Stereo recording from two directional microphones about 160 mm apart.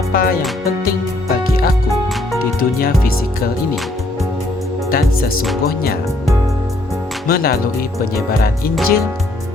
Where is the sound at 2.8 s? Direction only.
65° left (ahead or behind).